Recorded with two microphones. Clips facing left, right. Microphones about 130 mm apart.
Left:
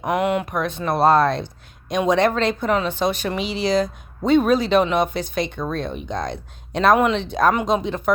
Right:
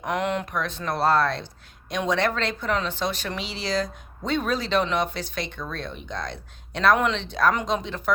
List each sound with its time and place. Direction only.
0.0 s speech: 10° left (ahead or behind)